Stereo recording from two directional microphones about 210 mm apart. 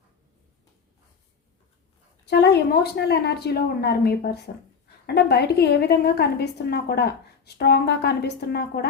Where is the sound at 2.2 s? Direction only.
55° left (ahead or behind).